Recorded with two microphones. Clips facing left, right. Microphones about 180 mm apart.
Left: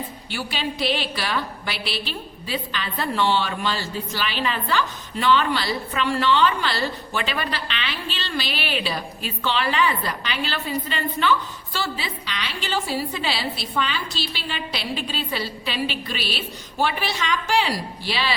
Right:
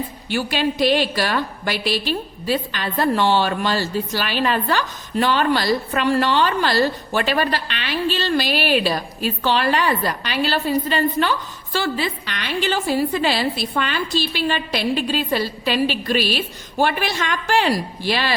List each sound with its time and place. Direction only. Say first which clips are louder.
0.3 s a woman's voice: right 7 dB; 45° right (ahead or behind)